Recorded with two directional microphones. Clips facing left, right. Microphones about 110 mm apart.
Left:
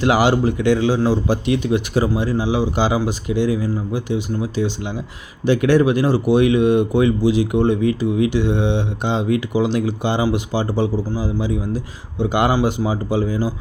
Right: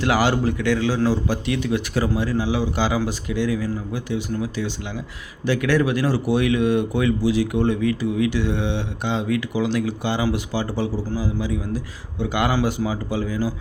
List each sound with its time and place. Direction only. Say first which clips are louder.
0.0 s speech: left 4 dB; 15° left (ahead or behind)